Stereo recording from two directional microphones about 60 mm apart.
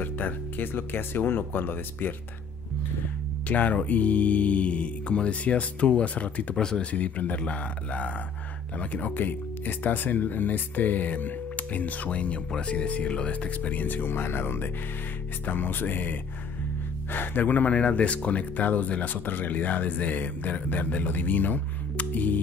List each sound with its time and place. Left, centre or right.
0.0 s speech: left
3.4 s speech: left
6.5 s speech: centre; by 22.4 s left